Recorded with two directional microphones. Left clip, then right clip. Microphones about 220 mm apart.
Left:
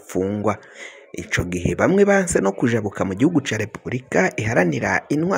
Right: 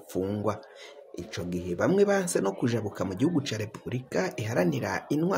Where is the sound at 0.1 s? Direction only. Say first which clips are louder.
Left 8 dB; 25° left (ahead or behind).